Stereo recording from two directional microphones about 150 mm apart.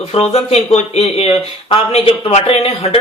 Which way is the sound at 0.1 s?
45° left (ahead or behind).